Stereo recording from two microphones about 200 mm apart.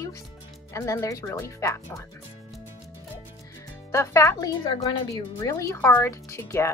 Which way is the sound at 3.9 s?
15° left (ahead or behind).